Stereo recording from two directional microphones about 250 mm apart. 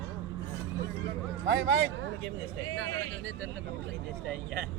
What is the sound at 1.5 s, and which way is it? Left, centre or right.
Speech, right.